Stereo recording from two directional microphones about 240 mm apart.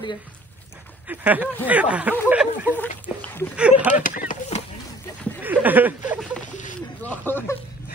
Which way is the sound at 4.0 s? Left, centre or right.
Left.